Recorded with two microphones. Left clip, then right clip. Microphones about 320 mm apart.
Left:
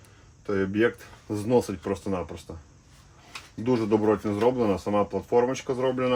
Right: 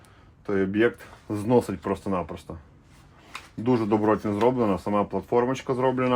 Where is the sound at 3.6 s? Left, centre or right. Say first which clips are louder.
Right 1 dB; centre.